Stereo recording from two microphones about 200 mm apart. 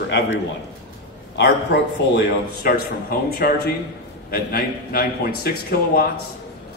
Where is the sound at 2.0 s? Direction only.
55° left (ahead or behind).